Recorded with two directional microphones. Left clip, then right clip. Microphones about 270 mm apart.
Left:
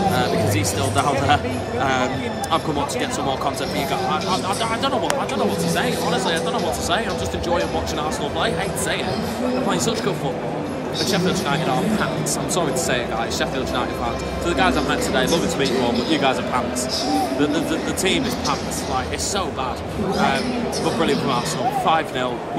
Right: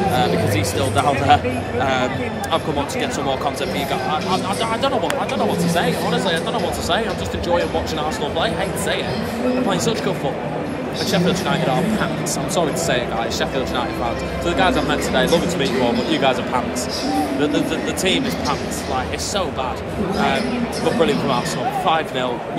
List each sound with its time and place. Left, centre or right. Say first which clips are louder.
0.9 s speech: right 3 dB; centre
5.8 s speech: right 2 dB; centre
9.7 s speech: right 1 dB; centre
14.6 s speech: right 1 dB; centre
20.8 s speech: right 3 dB; centre